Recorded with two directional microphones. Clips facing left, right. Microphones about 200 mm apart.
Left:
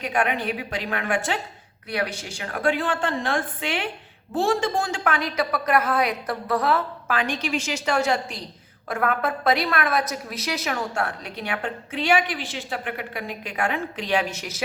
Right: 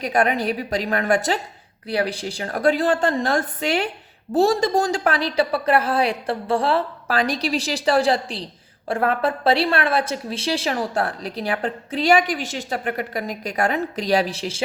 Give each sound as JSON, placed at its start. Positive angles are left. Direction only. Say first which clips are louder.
{"t": 0.0, "sound": "a woman's voice", "louder": "right 4 dB", "side_deg": -35}